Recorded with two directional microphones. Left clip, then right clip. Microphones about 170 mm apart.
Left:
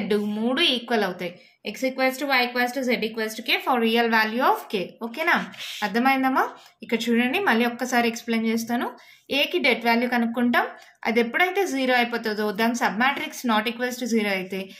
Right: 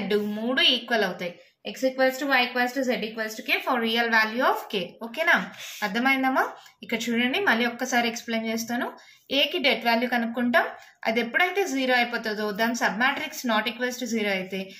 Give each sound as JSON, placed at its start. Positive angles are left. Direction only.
{"t": 0.1, "sound": "a woman's voice", "side_deg": 30}
{"t": 1.7, "sound": "a woman's voice", "side_deg": 50}